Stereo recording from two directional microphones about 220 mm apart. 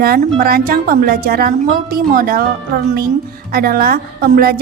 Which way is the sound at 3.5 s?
40° right (ahead or behind).